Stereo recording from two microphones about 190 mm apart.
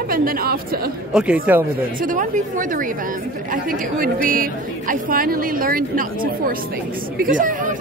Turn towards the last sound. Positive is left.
turn(degrees=-45)  # may be behind; listen again after turning